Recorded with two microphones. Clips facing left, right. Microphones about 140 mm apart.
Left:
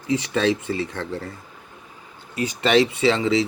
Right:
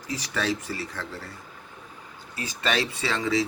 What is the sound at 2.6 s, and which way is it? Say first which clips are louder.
Speech: left 9 dB; 25° left (ahead or behind).